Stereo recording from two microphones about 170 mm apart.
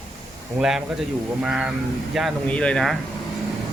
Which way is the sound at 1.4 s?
5° right (ahead or behind).